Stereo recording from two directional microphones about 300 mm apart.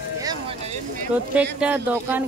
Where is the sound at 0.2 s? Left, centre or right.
Centre.